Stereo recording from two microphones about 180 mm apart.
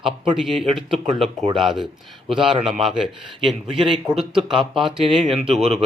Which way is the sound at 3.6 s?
30° right (ahead or behind).